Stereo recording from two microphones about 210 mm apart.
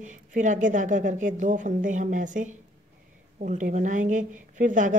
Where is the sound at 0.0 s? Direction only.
35° right (ahead or behind).